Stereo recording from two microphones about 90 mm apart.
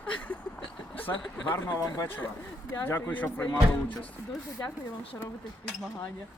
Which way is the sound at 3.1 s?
15° left (ahead or behind).